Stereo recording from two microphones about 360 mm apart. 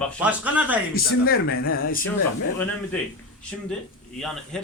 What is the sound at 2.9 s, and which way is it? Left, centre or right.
Speech, centre.